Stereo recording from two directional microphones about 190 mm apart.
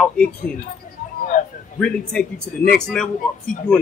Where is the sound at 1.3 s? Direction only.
40° left (ahead or behind).